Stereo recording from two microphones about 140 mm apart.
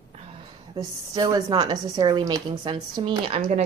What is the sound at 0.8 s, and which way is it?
A woman's voice, 30° right (ahead or behind).